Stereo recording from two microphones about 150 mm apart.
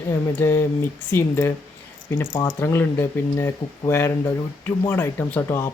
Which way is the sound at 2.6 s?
15° left (ahead or behind).